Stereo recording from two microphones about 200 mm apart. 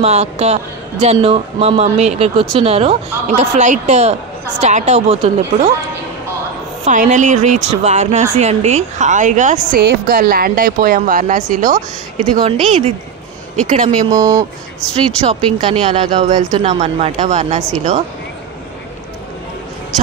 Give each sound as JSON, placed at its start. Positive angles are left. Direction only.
{"t": 0.0, "sound": "a woman's voice", "side_deg": -35}
{"t": 6.8, "sound": "a woman's voice", "side_deg": -40}
{"t": 9.8, "sound": "a woman's voice", "side_deg": -50}
{"t": 12.6, "sound": "a woman's voice", "side_deg": -30}
{"t": 13.8, "sound": "speech", "side_deg": -15}
{"t": 15.1, "sound": "speech", "side_deg": -25}